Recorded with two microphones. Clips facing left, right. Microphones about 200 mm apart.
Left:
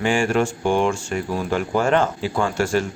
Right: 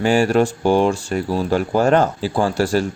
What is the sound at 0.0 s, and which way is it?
Speech, 40° right (ahead or behind).